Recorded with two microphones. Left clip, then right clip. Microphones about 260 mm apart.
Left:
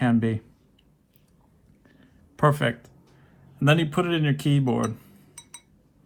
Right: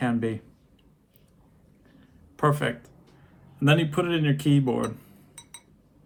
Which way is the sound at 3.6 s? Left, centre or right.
Left.